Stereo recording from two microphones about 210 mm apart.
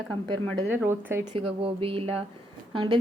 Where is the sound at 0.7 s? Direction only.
10° right (ahead or behind).